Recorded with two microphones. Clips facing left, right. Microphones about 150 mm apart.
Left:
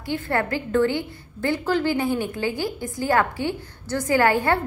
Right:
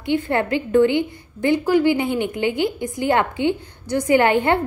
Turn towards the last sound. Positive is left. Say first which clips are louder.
# right 3 dB
turn(degrees=-20)  # may be behind; listen again after turning